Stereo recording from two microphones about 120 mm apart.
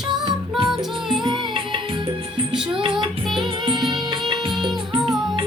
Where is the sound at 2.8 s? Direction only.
45° right (ahead or behind).